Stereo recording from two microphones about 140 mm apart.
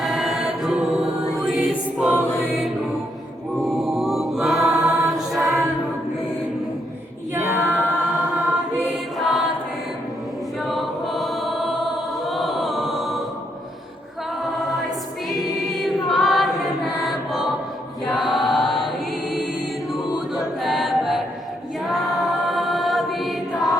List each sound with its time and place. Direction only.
0.0 s music: centre (ahead or behind)
1.4 s choir: centre (ahead or behind)
3.6 s mantra: centre (ahead or behind)
4.8 s music: 15° right (ahead or behind)
5.3 s music: centre (ahead or behind)
7.3 s a capella: 15° right (ahead or behind)
8.4 s choir: centre (ahead or behind)
10.7 s choir: centre (ahead or behind)
12.2 s music: centre (ahead or behind)
15.3 s choir: centre (ahead or behind)
18.3 s chant: centre (ahead or behind)
19.9 s music: centre (ahead or behind)